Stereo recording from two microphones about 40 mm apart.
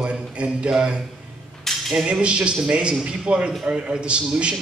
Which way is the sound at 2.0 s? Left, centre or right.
Right.